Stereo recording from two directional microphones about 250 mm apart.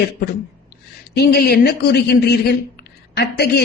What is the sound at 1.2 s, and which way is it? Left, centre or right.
Speech, left.